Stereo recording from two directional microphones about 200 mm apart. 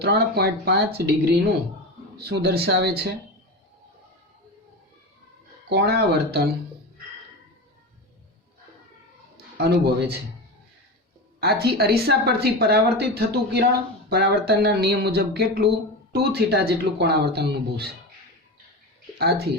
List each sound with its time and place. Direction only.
0.0 s speech: 55° right (ahead or behind)
5.6 s speech: 55° right (ahead or behind)
9.6 s speech: 55° right (ahead or behind)
11.3 s speech: 50° right (ahead or behind)
19.2 s speech: 50° right (ahead or behind)